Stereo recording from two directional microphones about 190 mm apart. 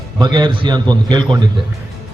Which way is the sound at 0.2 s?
25° right (ahead or behind).